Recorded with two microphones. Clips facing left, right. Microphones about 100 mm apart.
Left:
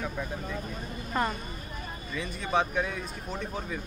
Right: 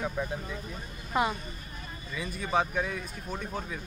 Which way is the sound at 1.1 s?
5° right (ahead or behind).